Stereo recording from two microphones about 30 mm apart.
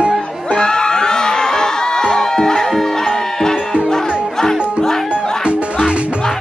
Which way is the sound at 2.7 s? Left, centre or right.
Centre.